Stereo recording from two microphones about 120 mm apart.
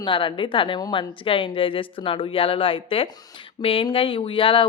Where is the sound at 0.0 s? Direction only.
45° left (ahead or behind).